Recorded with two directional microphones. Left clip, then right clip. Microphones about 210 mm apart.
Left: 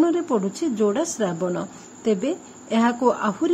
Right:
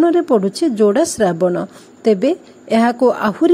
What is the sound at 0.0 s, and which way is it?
A woman's voice, 30° right (ahead or behind).